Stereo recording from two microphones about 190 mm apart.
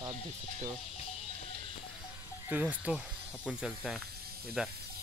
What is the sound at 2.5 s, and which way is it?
Speech, 5° right (ahead or behind).